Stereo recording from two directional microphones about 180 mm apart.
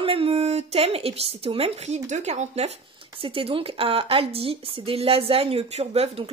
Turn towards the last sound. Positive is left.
turn(degrees=-35)  # may be behind; listen again after turning